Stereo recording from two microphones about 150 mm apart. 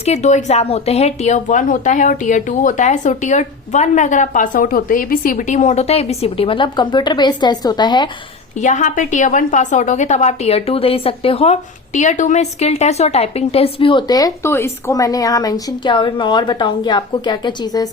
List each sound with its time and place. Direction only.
0.0 s speech: 50° left (ahead or behind); by 8.1 s 30° left (ahead or behind)
8.6 s a woman's voice: 55° left (ahead or behind); by 17.8 s 30° left (ahead or behind)